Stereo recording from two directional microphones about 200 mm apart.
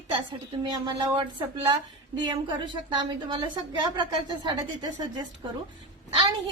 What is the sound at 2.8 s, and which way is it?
A woman's voice, 25° right (ahead or behind).